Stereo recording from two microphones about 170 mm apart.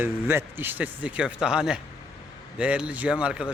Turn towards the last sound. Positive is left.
turn(degrees=-5)  # may be behind; listen again after turning